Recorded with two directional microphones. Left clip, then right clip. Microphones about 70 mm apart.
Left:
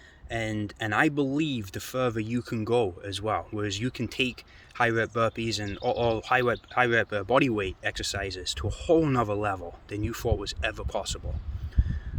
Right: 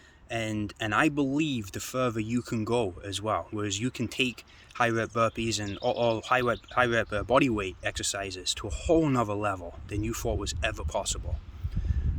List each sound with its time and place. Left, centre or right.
0.3 s speech: centre